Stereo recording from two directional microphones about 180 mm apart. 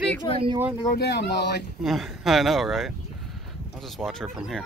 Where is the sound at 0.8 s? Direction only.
65° left (ahead or behind).